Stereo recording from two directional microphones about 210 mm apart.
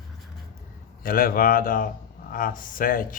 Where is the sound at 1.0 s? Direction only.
40° left (ahead or behind).